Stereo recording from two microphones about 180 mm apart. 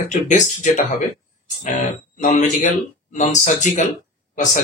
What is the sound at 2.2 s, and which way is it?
Speech, 40° left (ahead or behind).